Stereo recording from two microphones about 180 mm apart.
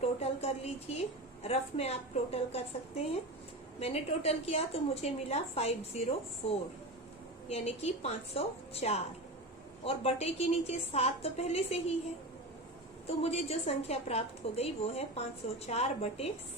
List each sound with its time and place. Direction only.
0.0 s a sound: 35° left (ahead or behind)
1.4 s a woman's voice: 35° left (ahead or behind)
13.1 s a woman's voice: 35° left (ahead or behind)